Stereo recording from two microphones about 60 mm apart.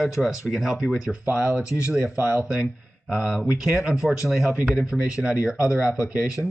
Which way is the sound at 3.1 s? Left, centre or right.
Centre.